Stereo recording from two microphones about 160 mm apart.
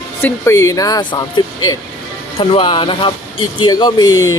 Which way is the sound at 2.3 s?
35° left (ahead or behind).